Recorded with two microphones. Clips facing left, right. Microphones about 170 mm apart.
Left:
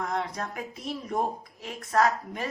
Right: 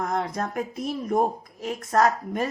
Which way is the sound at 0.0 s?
45° right (ahead or behind).